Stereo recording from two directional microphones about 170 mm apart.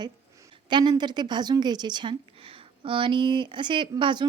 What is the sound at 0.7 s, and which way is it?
Speech, 25° right (ahead or behind).